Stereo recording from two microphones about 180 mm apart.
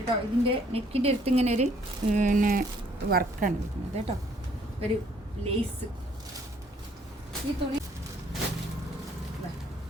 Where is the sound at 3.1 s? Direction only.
55° right (ahead or behind).